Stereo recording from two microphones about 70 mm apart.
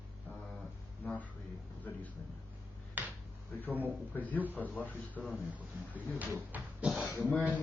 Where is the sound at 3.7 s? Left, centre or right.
Right.